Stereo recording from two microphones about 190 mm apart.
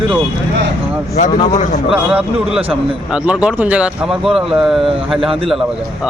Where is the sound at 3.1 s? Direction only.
5° right (ahead or behind).